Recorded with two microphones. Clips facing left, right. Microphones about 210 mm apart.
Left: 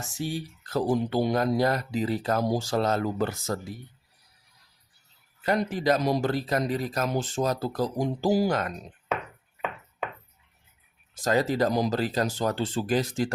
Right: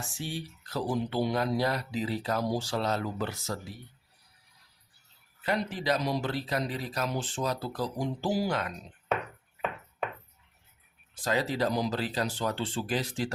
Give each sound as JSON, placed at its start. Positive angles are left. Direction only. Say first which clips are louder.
{"t": 0.0, "sound": "speech", "louder": "left 5 dB", "side_deg": 40}
{"t": 5.4, "sound": "speech", "louder": "left 5 dB", "side_deg": 45}
{"t": 11.1, "sound": "speech", "louder": "left 5 dB", "side_deg": 45}